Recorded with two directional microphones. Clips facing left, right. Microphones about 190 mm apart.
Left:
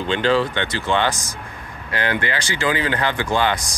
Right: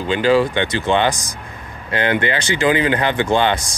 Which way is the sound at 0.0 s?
10° right (ahead or behind).